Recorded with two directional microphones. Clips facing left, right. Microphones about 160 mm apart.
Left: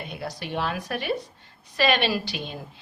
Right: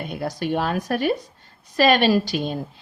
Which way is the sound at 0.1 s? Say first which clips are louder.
Right 9 dB; 45° right (ahead or behind).